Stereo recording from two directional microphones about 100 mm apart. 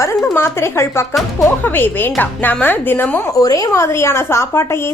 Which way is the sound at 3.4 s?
35° left (ahead or behind).